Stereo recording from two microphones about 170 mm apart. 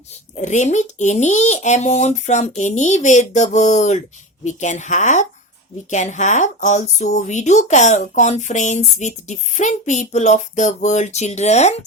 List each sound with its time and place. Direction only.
0.3 s speech: 45° left (ahead or behind)